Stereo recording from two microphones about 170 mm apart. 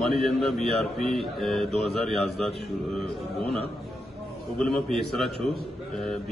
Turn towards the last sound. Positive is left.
turn(degrees=0)  # may be behind; listen again after turning